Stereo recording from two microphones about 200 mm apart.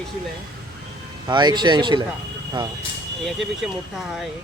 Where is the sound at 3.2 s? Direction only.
Centre (ahead or behind).